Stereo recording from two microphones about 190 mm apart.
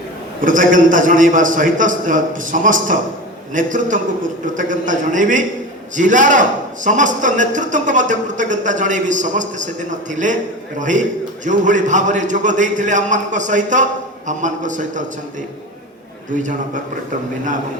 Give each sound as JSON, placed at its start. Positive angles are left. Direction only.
{"t": 0.4, "sound": "a man's voice", "side_deg": -45}
{"t": 16.4, "sound": "a man's voice", "side_deg": -40}